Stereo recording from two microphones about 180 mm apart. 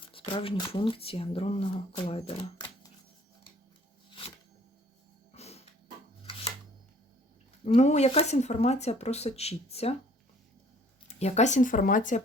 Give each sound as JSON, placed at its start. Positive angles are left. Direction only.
{"t": 0.1, "sound": "speech", "side_deg": 30}
{"t": 5.3, "sound": "music", "side_deg": 35}
{"t": 6.3, "sound": "shuffling cards", "side_deg": 30}
{"t": 7.6, "sound": "speech", "side_deg": 40}
{"t": 11.1, "sound": "speech", "side_deg": 40}